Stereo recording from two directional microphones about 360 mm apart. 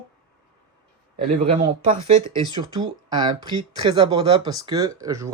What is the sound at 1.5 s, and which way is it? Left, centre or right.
Speech, centre.